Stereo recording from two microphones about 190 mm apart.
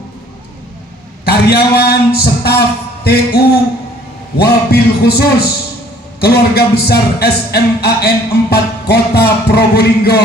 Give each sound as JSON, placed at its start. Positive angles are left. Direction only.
{"t": 1.2, "sound": "a man's voice", "side_deg": 55}